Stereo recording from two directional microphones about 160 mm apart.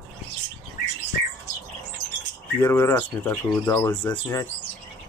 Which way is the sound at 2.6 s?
15° left (ahead or behind).